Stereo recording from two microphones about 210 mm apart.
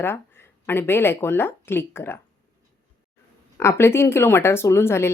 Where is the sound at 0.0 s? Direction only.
10° left (ahead or behind).